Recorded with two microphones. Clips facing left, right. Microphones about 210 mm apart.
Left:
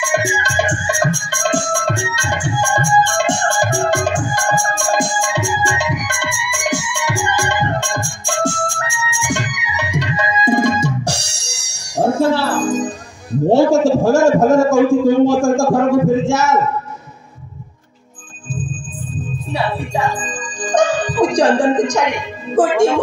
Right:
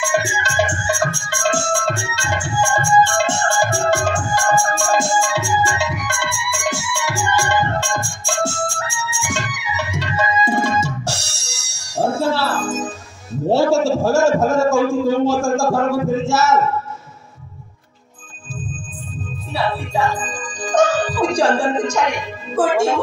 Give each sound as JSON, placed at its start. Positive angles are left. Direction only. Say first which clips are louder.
{"t": 0.1, "sound": "music", "louder": "left 2 dB", "side_deg": 15}
{"t": 13.5, "sound": "a sound", "louder": "left 3 dB", "side_deg": 15}
{"t": 19.5, "sound": "music", "louder": "left 1 dB", "side_deg": 15}